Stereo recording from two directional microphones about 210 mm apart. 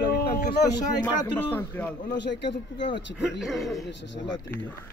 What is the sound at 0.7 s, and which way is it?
Speech, 20° left (ahead or behind).